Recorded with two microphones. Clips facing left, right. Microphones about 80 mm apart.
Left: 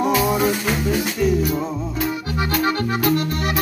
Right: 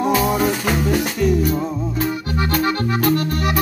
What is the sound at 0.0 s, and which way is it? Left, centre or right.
Music, right.